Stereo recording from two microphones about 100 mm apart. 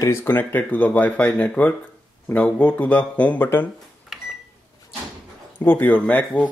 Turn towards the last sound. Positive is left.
turn(degrees=15)  # may be behind; listen again after turning